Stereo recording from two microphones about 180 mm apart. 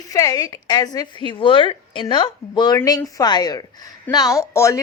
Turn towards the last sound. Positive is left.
turn(degrees=15)  # may be behind; listen again after turning